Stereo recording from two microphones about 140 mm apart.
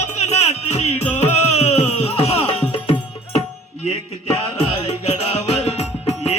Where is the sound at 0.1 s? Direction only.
50° left (ahead or behind).